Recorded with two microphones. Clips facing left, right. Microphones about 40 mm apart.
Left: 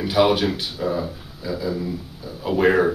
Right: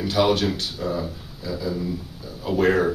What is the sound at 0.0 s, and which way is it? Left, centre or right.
A man's voice, centre.